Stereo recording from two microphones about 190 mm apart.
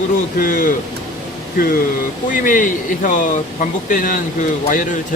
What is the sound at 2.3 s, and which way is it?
Speech, 45° left (ahead or behind).